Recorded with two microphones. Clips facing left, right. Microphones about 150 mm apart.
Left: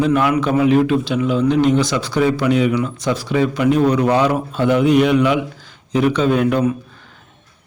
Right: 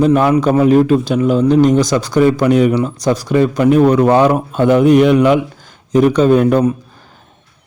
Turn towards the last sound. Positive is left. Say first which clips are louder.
# right 5 dB
turn(degrees=-45)  # may be behind; listen again after turning